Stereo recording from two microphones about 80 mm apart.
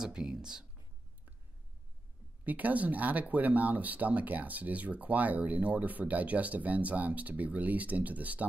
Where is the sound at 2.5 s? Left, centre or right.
Centre.